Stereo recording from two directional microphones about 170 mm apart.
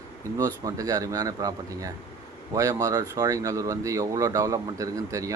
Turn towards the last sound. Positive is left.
turn(degrees=-20)  # may be behind; listen again after turning